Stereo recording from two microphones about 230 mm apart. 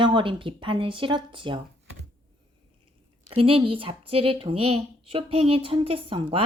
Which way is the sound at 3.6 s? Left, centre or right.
Right.